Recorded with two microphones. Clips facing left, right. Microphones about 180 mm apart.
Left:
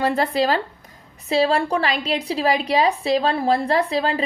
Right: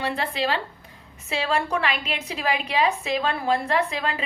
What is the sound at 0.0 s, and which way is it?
A woman's voice, 40° left (ahead or behind).